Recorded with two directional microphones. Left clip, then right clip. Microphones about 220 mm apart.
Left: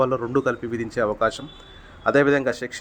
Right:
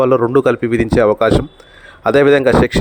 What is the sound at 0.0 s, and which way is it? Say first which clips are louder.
Speech: right 10 dB; 35° right (ahead or behind).